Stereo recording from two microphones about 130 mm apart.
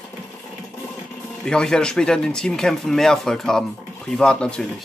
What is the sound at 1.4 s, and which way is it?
Speech, 5° left (ahead or behind).